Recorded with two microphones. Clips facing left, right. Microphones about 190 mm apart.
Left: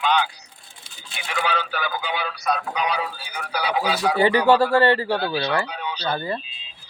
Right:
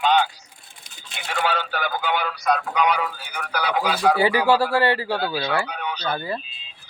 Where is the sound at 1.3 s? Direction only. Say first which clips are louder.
Right 1 dB; 45° right (ahead or behind).